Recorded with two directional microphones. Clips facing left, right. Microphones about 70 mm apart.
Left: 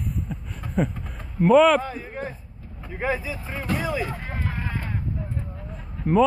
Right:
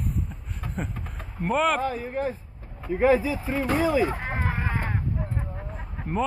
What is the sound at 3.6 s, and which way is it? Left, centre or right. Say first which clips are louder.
Speech: right 4 dB; right.